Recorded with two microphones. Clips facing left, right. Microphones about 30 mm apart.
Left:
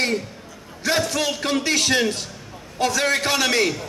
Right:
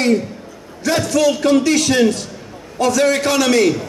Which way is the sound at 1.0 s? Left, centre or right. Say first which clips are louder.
Right 9 dB; left.